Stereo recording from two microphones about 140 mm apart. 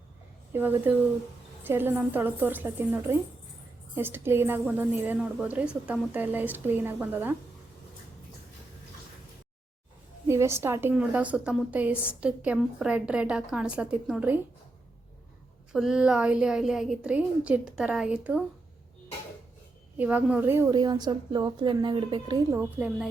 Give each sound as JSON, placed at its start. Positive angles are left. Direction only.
{"t": 0.5, "sound": "a woman's voice", "side_deg": -15}
{"t": 10.2, "sound": "a woman's voice", "side_deg": -20}
{"t": 15.7, "sound": "a woman's voice", "side_deg": -5}
{"t": 20.0, "sound": "a woman's voice", "side_deg": -10}
{"t": 20.7, "sound": "a woman's voice", "side_deg": -30}